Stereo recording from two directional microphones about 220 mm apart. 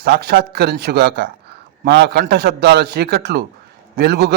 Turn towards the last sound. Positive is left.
turn(degrees=-50)  # may be behind; listen again after turning